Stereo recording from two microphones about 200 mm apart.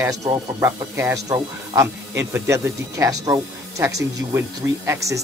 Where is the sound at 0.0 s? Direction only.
15° right (ahead or behind).